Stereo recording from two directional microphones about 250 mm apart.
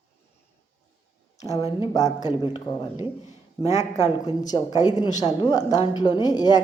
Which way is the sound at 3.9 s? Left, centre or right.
Centre.